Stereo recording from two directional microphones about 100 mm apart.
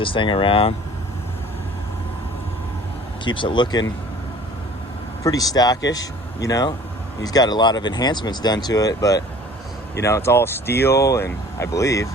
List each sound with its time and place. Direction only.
0.0 s speech: 55° left (ahead or behind)
3.2 s speech: 55° left (ahead or behind)
5.2 s speech: 35° left (ahead or behind)